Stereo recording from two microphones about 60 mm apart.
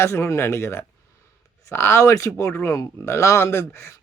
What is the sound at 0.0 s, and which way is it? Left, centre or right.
Speech, left.